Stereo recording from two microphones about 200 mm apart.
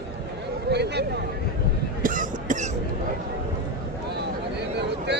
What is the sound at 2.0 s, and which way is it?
Cough, 40° right (ahead or behind).